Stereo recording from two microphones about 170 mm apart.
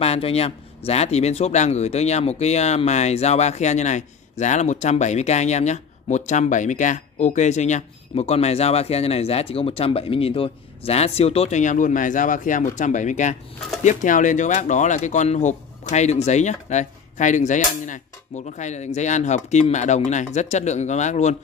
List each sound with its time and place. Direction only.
0.0 s speech: 35° left (ahead or behind)